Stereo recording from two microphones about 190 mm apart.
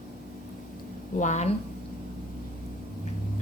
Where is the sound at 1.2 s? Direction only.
40° left (ahead or behind).